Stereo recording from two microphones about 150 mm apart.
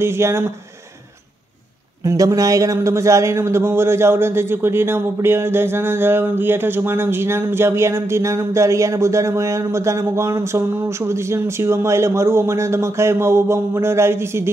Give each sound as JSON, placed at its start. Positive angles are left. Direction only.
{"t": 0.0, "sound": "speech", "side_deg": -15}
{"t": 2.0, "sound": "speech", "side_deg": -20}